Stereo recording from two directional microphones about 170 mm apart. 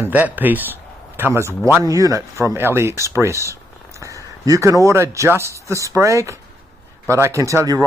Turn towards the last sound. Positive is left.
turn(degrees=-20)  # may be behind; listen again after turning